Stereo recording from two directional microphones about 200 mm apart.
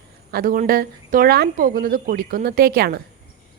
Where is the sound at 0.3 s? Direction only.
45° right (ahead or behind).